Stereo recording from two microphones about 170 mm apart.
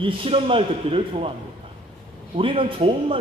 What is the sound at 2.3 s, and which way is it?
Speech, 30° right (ahead or behind).